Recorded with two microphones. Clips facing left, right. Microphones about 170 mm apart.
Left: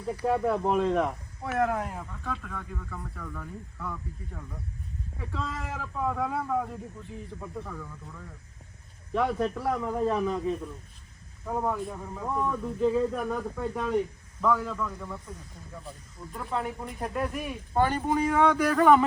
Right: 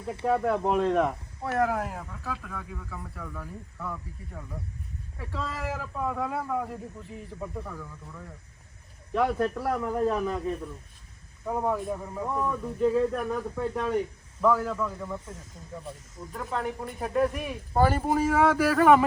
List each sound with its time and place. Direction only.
0.3 s speech: centre (ahead or behind)
16.5 s speech: centre (ahead or behind)